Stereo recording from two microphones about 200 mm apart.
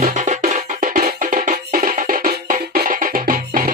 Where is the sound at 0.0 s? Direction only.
35° right (ahead or behind).